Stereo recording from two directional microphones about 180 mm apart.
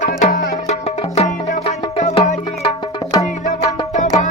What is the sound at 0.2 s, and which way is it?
Music, 40° left (ahead or behind).